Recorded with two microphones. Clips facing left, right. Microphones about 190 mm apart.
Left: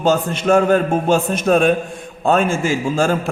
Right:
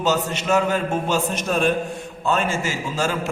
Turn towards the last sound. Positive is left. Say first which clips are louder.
# left 7 dB
turn(degrees=50)  # may be behind; listen again after turning